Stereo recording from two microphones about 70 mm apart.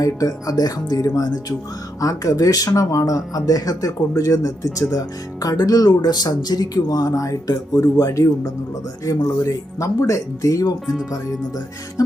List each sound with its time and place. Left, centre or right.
0.0 s speech: left
2.0 s speech: left
12.0 s speech: left